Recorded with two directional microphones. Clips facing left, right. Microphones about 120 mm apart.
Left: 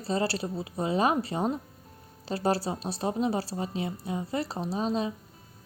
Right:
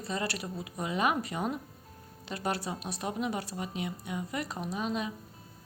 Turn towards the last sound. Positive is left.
turn(degrees=30)  # may be behind; listen again after turning